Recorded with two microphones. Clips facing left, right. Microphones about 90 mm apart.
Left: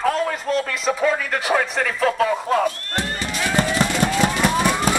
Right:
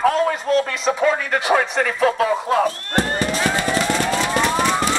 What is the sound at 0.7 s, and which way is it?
Speech, centre (ahead or behind).